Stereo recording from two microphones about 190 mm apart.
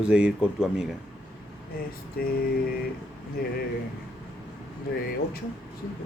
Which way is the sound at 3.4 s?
50° left (ahead or behind).